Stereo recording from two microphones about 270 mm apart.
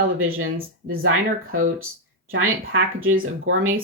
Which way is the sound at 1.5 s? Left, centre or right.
Right.